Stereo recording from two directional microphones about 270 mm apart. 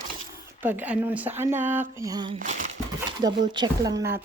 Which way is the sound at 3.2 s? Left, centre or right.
Centre.